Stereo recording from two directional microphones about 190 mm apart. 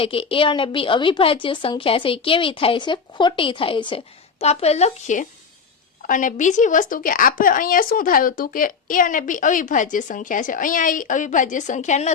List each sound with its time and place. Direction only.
0.0 s a woman's voice: 30° left (ahead or behind)